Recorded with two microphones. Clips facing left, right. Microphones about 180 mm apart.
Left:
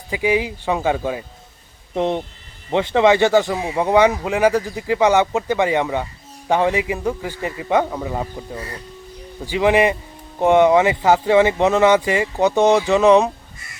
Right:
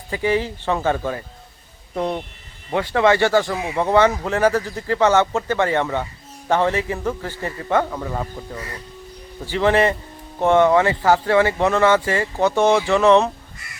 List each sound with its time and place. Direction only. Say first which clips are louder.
0.1 s speech: left 1 dB; 10° left (ahead or behind)